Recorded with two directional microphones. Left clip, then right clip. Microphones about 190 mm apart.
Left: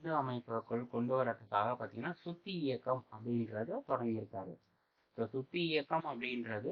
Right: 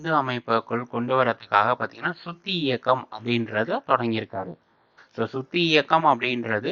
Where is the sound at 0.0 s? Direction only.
30° right (ahead or behind).